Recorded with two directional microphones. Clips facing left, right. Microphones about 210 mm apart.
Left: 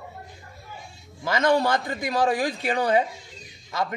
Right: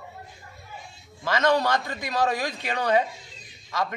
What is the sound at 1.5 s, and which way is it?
A man's voice, 30° left (ahead or behind).